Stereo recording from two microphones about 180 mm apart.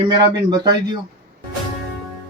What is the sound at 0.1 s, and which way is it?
Speech, 25° right (ahead or behind).